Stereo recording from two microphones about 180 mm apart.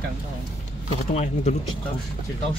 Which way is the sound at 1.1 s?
40° left (ahead or behind).